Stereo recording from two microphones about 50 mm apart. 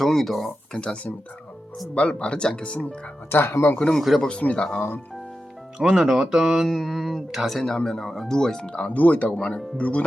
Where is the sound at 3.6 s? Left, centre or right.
Left.